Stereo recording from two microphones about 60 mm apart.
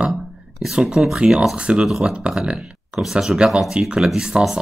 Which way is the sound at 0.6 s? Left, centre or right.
Centre.